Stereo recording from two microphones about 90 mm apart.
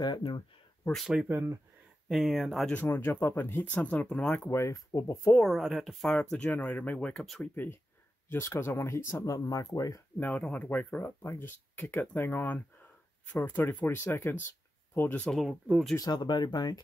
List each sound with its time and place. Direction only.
0.9 s speech: centre (ahead or behind)
1.3 s speech: 25° right (ahead or behind)
2.0 s speech: 5° right (ahead or behind)
2.7 s speech: 20° left (ahead or behind)
4.5 s speech: 30° left (ahead or behind)
5.4 s speech: centre (ahead or behind)
6.1 s speech: 10° left (ahead or behind)
7.2 s speech: 5° left (ahead or behind)
7.5 s speech: 20° left (ahead or behind); by 10.0 s 40° left (ahead or behind)
10.1 s speech: 20° left (ahead or behind)
15.2 s speech: centre (ahead or behind)
16.0 s speech: 50° left (ahead or behind)